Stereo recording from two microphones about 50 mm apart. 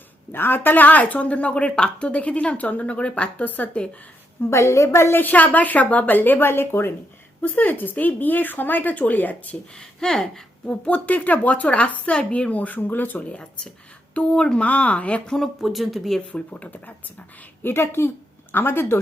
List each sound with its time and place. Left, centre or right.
0.3 s speech: left
4.4 s a woman's voice: left
5.2 s speech: left
7.4 s speech: left
9.7 s a woman's voice: centre
10.8 s speech: left
13.2 s speech: left
14.6 s speech: left
15.6 s speech: centre
16.3 s speech: left
17.6 s speech: left